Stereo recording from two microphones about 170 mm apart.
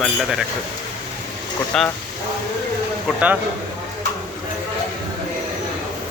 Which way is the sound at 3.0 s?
10° right (ahead or behind).